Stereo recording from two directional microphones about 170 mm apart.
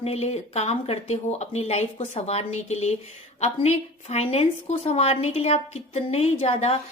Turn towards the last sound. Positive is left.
turn(degrees=35)  # may be behind; listen again after turning